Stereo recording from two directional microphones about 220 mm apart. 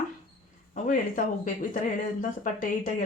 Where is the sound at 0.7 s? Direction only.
35° left (ahead or behind).